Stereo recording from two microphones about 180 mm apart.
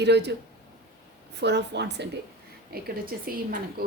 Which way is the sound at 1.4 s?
70° right (ahead or behind).